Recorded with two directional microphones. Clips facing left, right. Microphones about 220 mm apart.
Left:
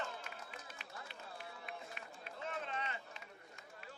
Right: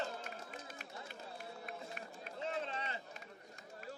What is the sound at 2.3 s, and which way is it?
Run, 30° right (ahead or behind).